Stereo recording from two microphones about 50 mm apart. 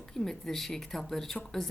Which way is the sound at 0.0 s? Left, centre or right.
Centre.